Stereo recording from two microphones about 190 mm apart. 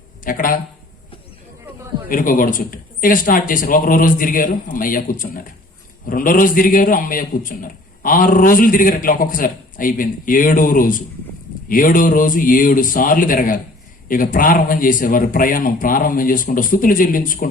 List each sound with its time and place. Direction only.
0.3 s a man's voice: 45° left (ahead or behind)
2.0 s a man's voice: 45° left (ahead or behind)